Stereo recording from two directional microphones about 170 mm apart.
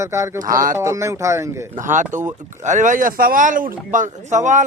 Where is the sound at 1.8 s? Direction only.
45° right (ahead or behind).